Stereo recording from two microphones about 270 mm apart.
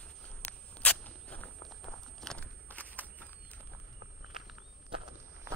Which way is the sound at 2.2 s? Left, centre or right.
Centre.